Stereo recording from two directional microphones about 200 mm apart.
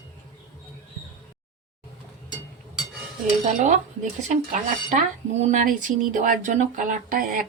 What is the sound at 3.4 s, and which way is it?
Speech, 35° right (ahead or behind).